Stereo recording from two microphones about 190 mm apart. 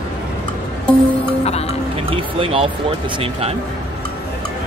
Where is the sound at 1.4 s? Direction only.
35° left (ahead or behind).